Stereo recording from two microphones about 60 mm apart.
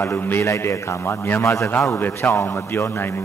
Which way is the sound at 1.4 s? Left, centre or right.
Left.